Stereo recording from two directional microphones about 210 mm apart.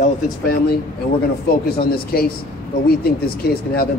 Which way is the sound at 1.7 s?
45° left (ahead or behind).